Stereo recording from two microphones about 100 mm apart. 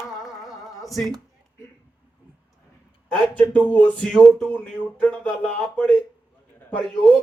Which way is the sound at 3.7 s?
10° left (ahead or behind).